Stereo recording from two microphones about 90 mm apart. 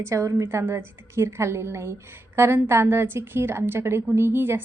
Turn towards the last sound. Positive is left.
turn(degrees=-25)  # may be behind; listen again after turning